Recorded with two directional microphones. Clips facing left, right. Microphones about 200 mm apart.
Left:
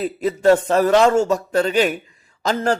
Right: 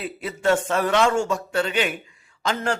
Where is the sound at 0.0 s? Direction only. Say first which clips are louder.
Left 7 dB; 40° left (ahead or behind).